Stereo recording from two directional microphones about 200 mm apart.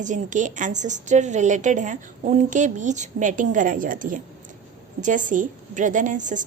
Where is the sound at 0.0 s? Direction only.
40° right (ahead or behind).